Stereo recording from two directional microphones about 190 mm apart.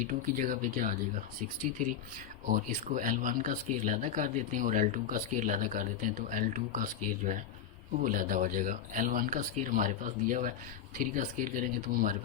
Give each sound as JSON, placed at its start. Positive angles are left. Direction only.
{"t": 0.0, "sound": "speech", "side_deg": -45}